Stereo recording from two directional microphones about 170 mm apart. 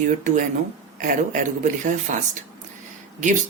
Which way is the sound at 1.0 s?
50° right (ahead or behind).